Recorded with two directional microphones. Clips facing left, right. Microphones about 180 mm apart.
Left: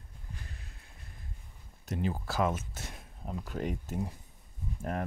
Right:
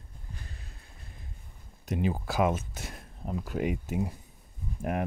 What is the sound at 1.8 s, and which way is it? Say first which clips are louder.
Speech: right 4 dB; 15° right (ahead or behind).